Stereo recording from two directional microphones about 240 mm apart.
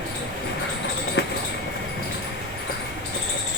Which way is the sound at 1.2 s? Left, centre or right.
Left.